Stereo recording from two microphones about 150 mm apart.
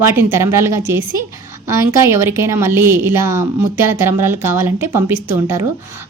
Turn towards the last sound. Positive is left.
turn(degrees=-15)  # may be behind; listen again after turning